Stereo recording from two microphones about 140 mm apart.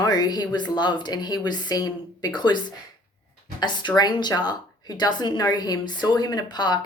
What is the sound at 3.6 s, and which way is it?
Speech, 30° left (ahead or behind).